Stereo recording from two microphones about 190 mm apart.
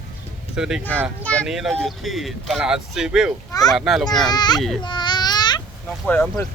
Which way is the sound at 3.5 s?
20° left (ahead or behind).